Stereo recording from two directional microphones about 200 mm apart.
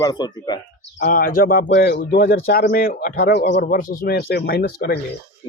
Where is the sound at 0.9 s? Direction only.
45° left (ahead or behind).